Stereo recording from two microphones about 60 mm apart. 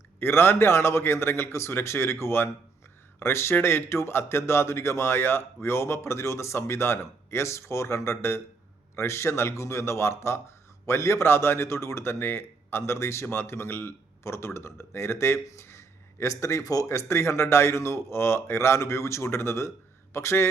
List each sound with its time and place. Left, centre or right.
0.2 s speech: left
16.9 s speech: left